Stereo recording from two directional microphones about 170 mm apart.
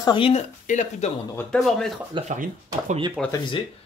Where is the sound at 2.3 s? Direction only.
45° right (ahead or behind).